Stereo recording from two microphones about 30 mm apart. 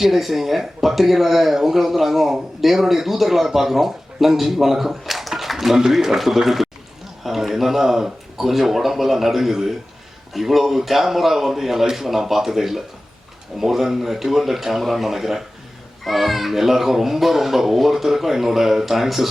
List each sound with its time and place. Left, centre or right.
0.0 s speech: centre
5.3 s a sound: centre
5.9 s speech: centre
15.0 s speech: centre